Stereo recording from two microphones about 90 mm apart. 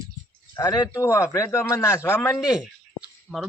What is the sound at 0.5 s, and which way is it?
Speech, 50° left (ahead or behind).